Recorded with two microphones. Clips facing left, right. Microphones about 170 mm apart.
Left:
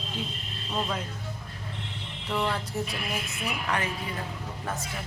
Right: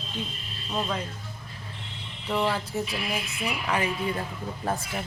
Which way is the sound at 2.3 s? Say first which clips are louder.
Right 3 dB; 5° right (ahead or behind).